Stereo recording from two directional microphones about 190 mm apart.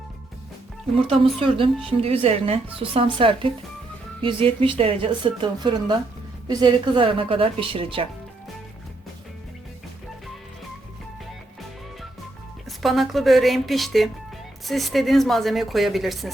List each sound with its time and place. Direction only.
1.2 s a woman's voice: 30° right (ahead or behind)
12.6 s a woman's voice: centre (ahead or behind)